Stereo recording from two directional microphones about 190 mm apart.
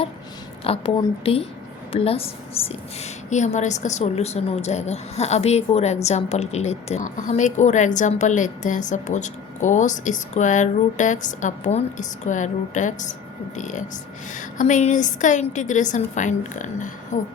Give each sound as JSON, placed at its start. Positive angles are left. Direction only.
{"t": 0.6, "sound": "a woman's voice", "side_deg": 30}